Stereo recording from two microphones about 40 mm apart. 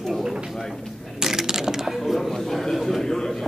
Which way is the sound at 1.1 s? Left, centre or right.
Centre.